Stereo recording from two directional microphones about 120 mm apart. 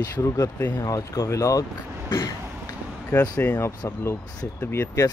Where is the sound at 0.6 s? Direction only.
15° left (ahead or behind).